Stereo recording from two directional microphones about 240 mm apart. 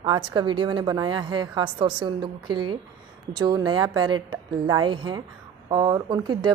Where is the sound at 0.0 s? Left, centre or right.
Centre.